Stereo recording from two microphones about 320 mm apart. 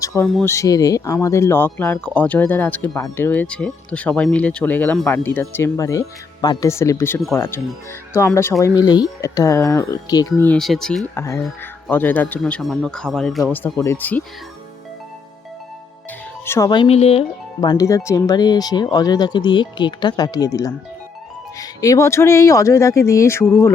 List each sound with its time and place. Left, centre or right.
0.0 s speech: centre
16.5 s speech: centre